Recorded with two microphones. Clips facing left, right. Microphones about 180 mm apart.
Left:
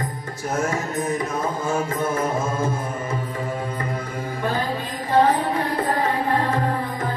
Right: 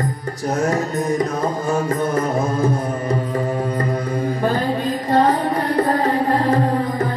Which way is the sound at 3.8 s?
35° right (ahead or behind).